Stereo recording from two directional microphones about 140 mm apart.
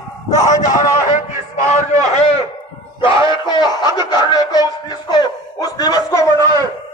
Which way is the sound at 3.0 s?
35° left (ahead or behind).